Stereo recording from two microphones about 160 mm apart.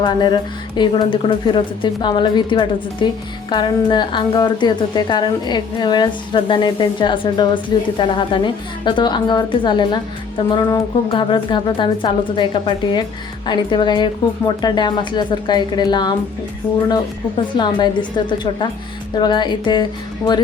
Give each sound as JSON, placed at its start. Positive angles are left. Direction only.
{"t": 0.0, "sound": "a woman's voice", "side_deg": 25}
{"t": 17.5, "sound": "a woman's voice", "side_deg": 30}